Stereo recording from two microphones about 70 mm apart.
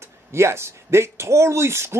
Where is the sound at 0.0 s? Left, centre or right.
Right.